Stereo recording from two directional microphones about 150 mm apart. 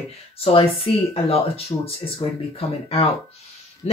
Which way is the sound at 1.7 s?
35° left (ahead or behind).